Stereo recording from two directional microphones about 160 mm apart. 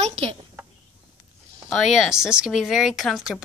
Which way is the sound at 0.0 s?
40° right (ahead or behind).